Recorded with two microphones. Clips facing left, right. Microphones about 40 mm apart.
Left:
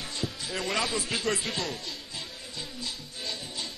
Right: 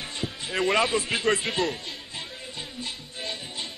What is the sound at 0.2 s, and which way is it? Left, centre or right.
Speech, right.